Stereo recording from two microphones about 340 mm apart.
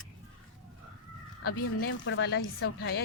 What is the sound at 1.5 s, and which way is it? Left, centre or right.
A woman's voice, left.